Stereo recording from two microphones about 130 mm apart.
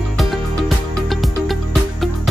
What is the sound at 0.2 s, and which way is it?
Music, centre (ahead or behind).